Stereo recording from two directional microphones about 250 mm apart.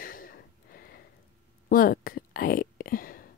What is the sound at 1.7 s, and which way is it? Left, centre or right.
Whispering, left.